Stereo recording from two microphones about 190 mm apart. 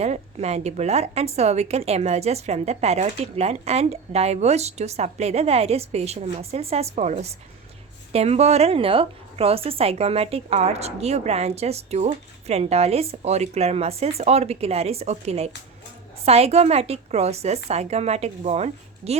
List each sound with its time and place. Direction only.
0.0 s a woman's voice: 35° right (ahead or behind)